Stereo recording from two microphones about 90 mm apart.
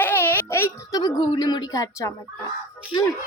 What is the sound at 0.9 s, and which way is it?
Speech, 45° left (ahead or behind).